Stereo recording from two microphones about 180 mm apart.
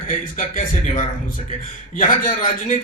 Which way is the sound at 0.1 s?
50° left (ahead or behind).